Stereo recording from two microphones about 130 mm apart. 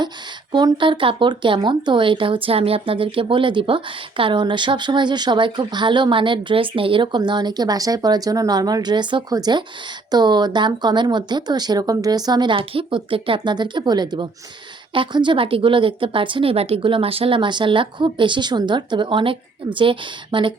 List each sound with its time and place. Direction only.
0.5 s speech: 35° right (ahead or behind)